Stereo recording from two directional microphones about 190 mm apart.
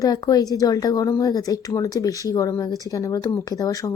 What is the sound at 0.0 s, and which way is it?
Speech, 20° left (ahead or behind).